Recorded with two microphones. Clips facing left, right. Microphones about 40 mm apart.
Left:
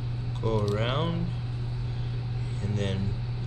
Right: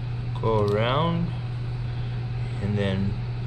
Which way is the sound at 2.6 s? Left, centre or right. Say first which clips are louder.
Right 6 dB; centre.